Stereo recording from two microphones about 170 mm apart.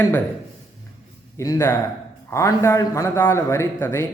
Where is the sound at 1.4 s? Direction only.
15° left (ahead or behind).